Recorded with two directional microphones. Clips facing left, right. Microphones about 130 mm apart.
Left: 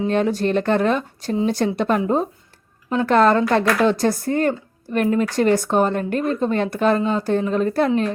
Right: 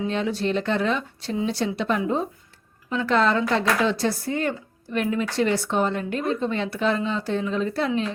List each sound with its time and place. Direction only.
0.1 s speech: 50° left (ahead or behind)